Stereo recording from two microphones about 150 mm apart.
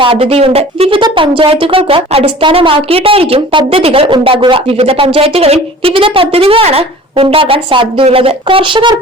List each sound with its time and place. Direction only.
0.0 s speech: 40° right (ahead or behind)